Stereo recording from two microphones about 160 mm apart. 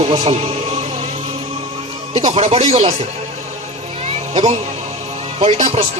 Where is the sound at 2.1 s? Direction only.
40° right (ahead or behind).